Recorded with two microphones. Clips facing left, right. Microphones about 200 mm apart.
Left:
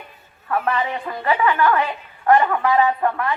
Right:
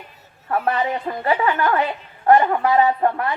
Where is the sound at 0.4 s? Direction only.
30° right (ahead or behind).